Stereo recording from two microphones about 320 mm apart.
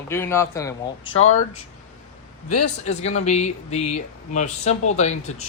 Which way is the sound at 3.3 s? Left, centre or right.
Left.